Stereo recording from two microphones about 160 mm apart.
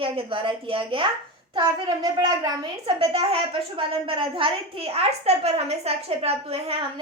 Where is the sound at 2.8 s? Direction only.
35° right (ahead or behind).